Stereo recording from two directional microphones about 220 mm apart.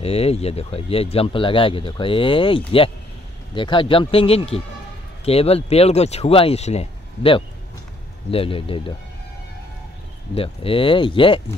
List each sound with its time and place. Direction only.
0.0 s speech: 25° left (ahead or behind)
10.3 s speech: 25° left (ahead or behind)